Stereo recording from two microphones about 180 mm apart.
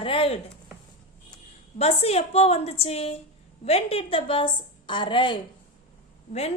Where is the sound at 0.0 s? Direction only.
30° left (ahead or behind).